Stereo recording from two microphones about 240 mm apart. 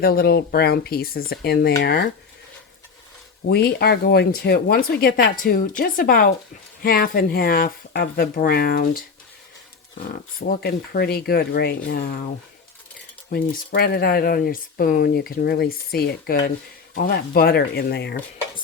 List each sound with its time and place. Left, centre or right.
0.0 s speech: left
3.5 s speech: left
10.6 s speech: left
13.3 s speech: left